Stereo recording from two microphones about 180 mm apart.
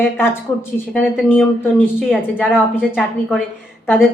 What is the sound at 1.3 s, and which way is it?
Speech, 10° left (ahead or behind).